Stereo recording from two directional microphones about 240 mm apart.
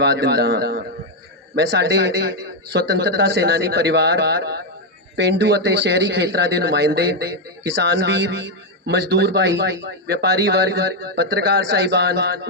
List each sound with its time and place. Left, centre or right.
0.0 s a man's voice: right